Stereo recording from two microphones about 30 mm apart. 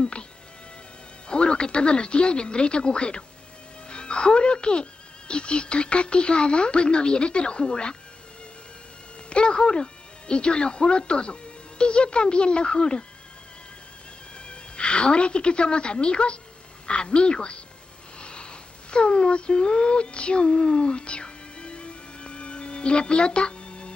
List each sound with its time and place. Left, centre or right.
1.3 s speech: left
3.9 s music: left
5.3 s speech: left
9.3 s speech: left
14.5 s a woman's voice: left
18.2 s a sound: left